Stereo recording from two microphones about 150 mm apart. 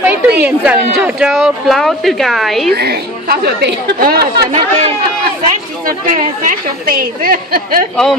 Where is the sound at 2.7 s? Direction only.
90° right.